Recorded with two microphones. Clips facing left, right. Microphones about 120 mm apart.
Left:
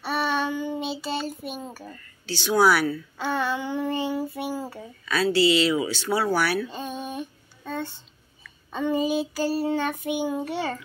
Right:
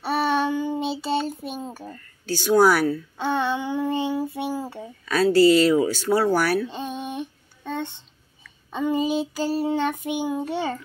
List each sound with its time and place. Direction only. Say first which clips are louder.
0.0 s child singing: right 3 dB; 30° right (ahead or behind)
1.6 s speech: right 3 dB; 20° right (ahead or behind)
2.2 s speech: right 3 dB; 45° right (ahead or behind)
3.2 s child singing: right 2 dB; 20° right (ahead or behind)
4.3 s a sound: right 2 dB; 20° right (ahead or behind)
5.0 s speech: right 5 dB; 50° right (ahead or behind)
6.7 s child singing: right 2 dB; 15° right (ahead or behind)